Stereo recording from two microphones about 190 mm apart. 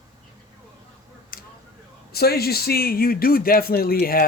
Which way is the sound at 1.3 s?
50° left (ahead or behind).